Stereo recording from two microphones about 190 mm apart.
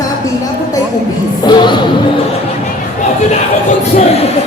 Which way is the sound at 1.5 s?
25° left (ahead or behind).